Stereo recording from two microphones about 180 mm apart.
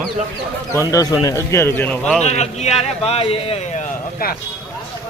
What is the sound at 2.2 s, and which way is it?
A man's voice, 40° left (ahead or behind).